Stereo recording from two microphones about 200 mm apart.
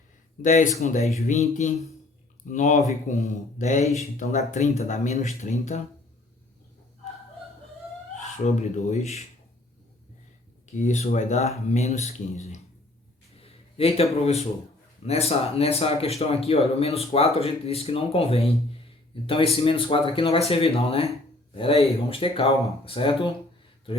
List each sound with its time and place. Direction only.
0.4 s speech: 35° left (ahead or behind)
8.4 s speech: 35° left (ahead or behind)
10.8 s a man's voice: 35° left (ahead or behind)